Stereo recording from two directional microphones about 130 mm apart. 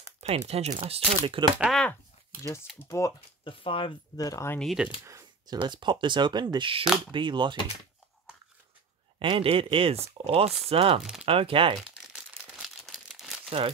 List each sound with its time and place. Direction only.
0.5 s speech: 55° right (ahead or behind)
1.6 s speech: centre (ahead or behind)
2.4 s speech: 25° left (ahead or behind)
3.4 s speech: 45° left (ahead or behind)
4.2 s speech: 25° left (ahead or behind)
4.6 s speech: centre (ahead or behind)
5.2 s speech: 35° right (ahead or behind)
9.2 s speech: 45° right (ahead or behind)
11.0 s speech: 5° right (ahead or behind)
11.2 s speech: 45° right (ahead or behind)
12.2 s crumpling: 5° right (ahead or behind)